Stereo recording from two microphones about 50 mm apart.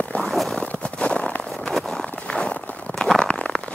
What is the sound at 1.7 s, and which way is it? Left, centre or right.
Clip-clop, centre.